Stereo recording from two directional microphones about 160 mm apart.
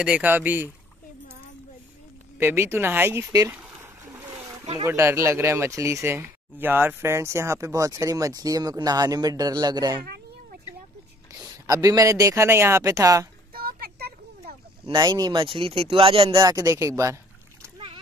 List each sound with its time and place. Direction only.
0.0 s speech: 10° right (ahead or behind)
2.3 s speech: 15° right (ahead or behind)
3.5 s a sound: 15° right (ahead or behind)
4.8 s speech: 15° right (ahead or behind)
10.0 s a sound: 80° right
11.6 s speech: 20° right (ahead or behind)
13.5 s a sound: 70° right (ahead or behind)
14.9 s speech: 25° right (ahead or behind)
16.3 s speech: 20° right (ahead or behind)
17.7 s splash: 30° right (ahead or behind)